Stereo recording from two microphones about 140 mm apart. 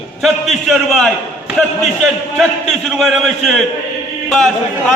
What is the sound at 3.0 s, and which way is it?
Speech, centre (ahead or behind).